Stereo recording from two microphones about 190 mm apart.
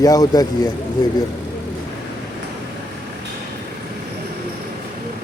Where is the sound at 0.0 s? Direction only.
20° left (ahead or behind).